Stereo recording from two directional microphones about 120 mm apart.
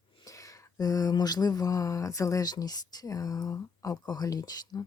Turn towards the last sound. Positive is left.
turn(degrees=30)  # may be behind; listen again after turning